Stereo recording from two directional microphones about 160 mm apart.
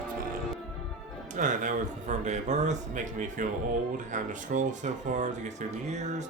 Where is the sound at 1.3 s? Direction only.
50° right (ahead or behind).